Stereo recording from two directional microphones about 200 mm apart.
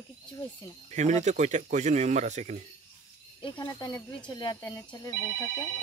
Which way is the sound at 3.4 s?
25° left (ahead or behind).